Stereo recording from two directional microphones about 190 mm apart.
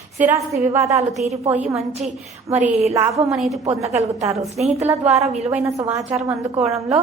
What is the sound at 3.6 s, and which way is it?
A woman's voice, 35° right (ahead or behind).